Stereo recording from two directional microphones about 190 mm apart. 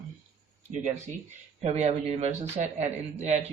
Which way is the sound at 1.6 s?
35° right (ahead or behind).